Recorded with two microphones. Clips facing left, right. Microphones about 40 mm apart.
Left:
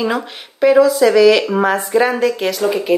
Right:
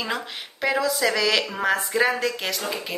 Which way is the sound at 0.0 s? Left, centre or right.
Centre.